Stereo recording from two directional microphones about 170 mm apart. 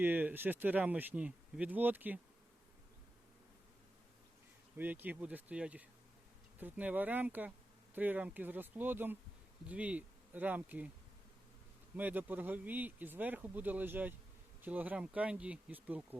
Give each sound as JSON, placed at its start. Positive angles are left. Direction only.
{"t": 0.0, "sound": "speech", "side_deg": -10}
{"t": 4.8, "sound": "speech", "side_deg": -10}
{"t": 11.9, "sound": "speech", "side_deg": -10}